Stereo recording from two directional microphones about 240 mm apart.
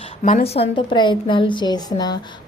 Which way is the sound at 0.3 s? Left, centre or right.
Left.